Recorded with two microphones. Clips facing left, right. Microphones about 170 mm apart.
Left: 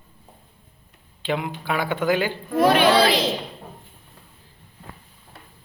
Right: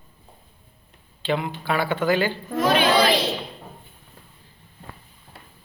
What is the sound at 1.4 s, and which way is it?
Speech, 10° left (ahead or behind).